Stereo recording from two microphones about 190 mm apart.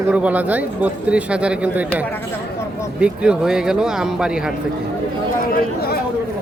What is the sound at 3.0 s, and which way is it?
A man's voice, 5° right (ahead or behind).